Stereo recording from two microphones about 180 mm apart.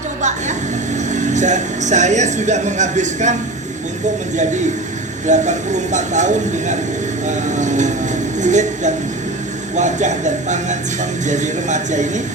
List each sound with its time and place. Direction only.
0.2 s vehicle: 40° right (ahead or behind)
1.1 s speech: 40° right (ahead or behind)
5.2 s speech: 40° right (ahead or behind)